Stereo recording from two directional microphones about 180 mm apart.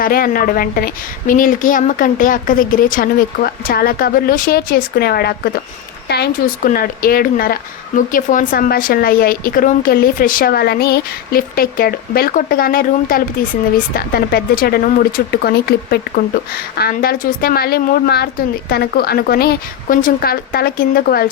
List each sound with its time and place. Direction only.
0.0 s a woman's voice: 55° left (ahead or behind)